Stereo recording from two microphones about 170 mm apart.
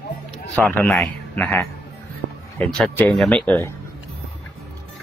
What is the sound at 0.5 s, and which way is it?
A man's voice, 10° left (ahead or behind).